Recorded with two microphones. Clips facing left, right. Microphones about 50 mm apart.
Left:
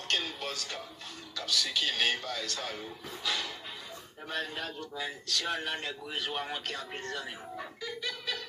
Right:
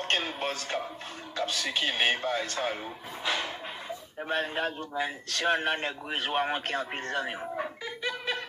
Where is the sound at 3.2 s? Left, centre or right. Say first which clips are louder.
Right 4 dB; right.